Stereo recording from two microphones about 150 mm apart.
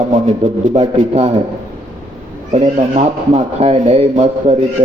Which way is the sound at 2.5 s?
45° right (ahead or behind).